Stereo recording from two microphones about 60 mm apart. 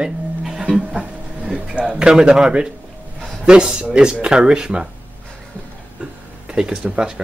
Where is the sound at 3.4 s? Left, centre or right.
Centre.